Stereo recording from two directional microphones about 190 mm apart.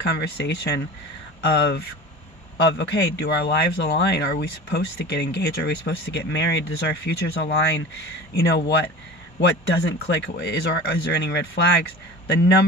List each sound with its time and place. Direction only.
0.0 s a man's voice: 60° left (ahead or behind)